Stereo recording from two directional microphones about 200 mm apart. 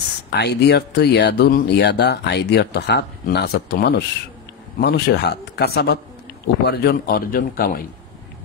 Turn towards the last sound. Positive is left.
turn(degrees=45)  # may be behind; listen again after turning